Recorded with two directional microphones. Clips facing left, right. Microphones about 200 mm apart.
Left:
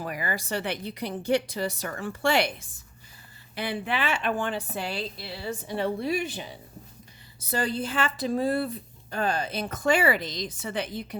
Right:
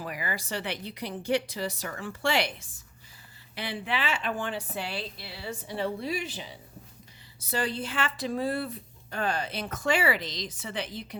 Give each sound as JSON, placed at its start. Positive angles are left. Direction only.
{"t": 0.0, "sound": "a woman's voice", "side_deg": 50}
{"t": 7.5, "sound": "speech", "side_deg": 45}